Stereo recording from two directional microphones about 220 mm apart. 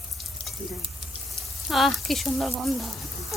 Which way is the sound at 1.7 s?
Centre (ahead or behind).